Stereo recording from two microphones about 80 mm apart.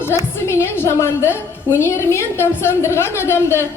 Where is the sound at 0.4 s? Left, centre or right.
Left.